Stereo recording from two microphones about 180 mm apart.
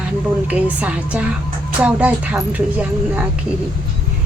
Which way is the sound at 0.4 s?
5° right (ahead or behind).